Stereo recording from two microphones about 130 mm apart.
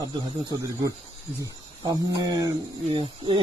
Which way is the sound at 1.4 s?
25° right (ahead or behind).